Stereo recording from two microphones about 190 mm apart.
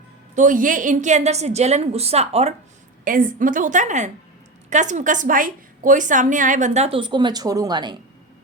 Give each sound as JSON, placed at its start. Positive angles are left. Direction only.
{"t": 0.3, "sound": "a woman's voice", "side_deg": -45}
{"t": 3.0, "sound": "a woman's voice", "side_deg": -45}